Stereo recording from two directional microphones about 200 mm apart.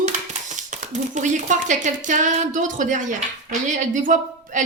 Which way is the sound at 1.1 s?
35° right (ahead or behind).